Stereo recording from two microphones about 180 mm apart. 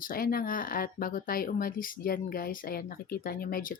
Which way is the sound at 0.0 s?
50° left (ahead or behind).